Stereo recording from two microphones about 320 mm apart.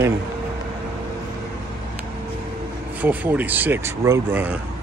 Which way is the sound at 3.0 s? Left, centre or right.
Centre.